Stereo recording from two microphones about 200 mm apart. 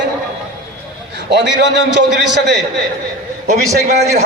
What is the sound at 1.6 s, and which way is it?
Speech, 60° right (ahead or behind).